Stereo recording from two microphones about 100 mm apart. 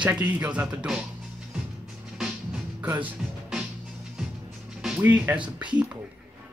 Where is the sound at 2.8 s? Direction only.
15° right (ahead or behind).